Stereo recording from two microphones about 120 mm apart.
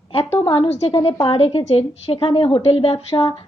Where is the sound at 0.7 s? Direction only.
60° left (ahead or behind).